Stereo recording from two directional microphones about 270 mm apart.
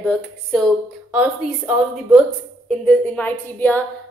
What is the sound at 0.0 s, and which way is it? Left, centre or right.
A woman's voice, centre.